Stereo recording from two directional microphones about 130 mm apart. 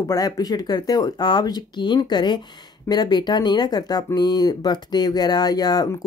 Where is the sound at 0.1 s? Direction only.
30° left (ahead or behind).